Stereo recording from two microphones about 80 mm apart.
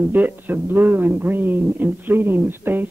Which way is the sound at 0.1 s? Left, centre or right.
Right.